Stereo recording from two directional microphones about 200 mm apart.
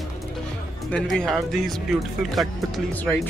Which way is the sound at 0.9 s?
Centre (ahead or behind).